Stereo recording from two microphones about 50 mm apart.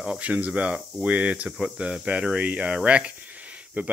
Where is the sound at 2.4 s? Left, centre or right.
Right.